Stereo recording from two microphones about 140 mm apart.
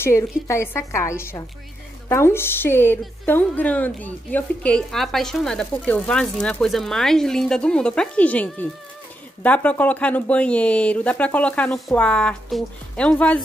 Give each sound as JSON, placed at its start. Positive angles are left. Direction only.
{"t": 0.0, "sound": "a woman's voice", "side_deg": 20}